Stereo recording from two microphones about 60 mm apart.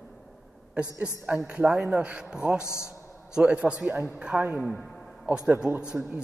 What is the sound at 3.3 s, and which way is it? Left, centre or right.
A woman's voice, centre.